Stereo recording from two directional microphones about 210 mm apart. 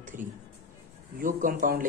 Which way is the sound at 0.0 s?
40° right (ahead or behind).